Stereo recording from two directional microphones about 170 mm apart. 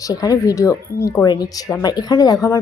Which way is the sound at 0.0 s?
20° left (ahead or behind).